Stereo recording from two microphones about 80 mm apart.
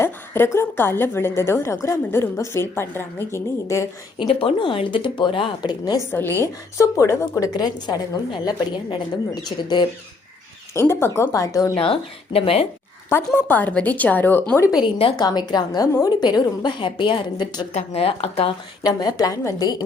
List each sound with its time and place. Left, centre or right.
0.0 s a woman's voice: left
4.2 s speech: left
6.0 s a woman's voice: left
6.4 s a woman's voice: left
10.8 s a woman's voice: left
11.3 s a woman's voice: left
12.3 s speech: left
13.1 s a woman's voice: left
14.8 s a woman's voice: left
18.8 s a woman's voice: left